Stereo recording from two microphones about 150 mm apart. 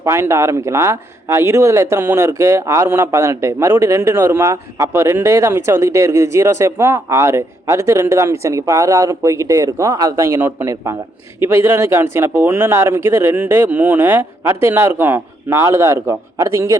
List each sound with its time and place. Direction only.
0.0 s speech: 20° right (ahead or behind)